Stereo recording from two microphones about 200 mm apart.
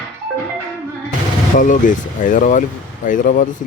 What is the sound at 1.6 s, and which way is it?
Speech, 40° left (ahead or behind).